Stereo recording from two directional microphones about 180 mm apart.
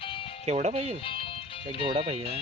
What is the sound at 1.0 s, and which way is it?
Music, 30° left (ahead or behind).